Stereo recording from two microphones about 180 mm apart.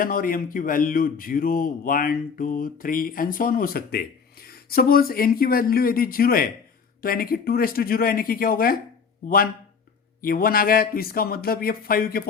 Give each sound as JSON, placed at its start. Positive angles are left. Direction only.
{"t": 0.0, "sound": "a man's voice", "side_deg": 50}
{"t": 10.2, "sound": "speech", "side_deg": 55}